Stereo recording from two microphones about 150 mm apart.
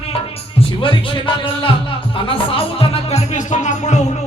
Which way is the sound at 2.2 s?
35° left (ahead or behind).